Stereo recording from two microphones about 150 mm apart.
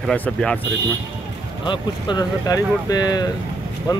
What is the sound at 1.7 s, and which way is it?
Speech, 30° left (ahead or behind).